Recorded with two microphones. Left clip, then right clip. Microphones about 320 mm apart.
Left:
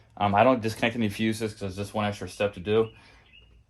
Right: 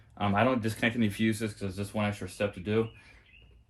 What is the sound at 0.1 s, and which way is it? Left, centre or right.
Speech, centre.